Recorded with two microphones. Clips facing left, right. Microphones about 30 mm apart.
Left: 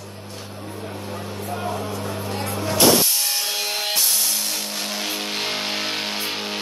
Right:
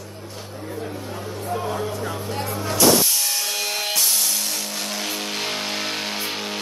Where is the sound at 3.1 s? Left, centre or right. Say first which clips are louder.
Even; centre.